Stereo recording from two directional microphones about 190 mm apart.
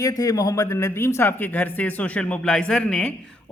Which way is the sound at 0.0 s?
15° left (ahead or behind).